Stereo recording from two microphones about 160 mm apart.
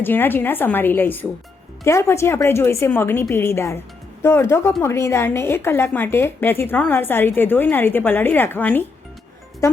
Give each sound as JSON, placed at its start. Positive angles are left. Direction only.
{"t": 0.0, "sound": "a woman's voice", "side_deg": 10}